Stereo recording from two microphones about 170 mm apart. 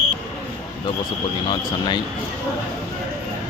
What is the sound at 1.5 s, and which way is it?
Speech, 25° left (ahead or behind).